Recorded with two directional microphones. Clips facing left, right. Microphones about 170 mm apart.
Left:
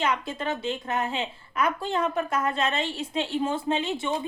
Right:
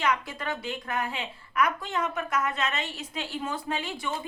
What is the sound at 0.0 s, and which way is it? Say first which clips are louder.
A woman's voice: left 2 dB; 25° left (ahead or behind).